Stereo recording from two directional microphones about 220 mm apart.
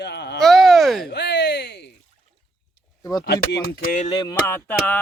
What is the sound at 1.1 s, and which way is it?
Speech, 50° left (ahead or behind).